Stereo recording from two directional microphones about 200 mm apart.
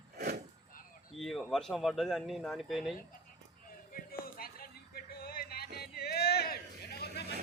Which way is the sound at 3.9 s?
45° left (ahead or behind).